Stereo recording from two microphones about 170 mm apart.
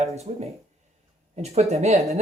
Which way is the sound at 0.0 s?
40° right (ahead or behind).